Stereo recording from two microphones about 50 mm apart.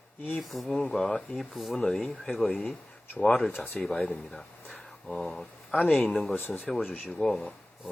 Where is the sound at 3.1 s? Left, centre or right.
Left.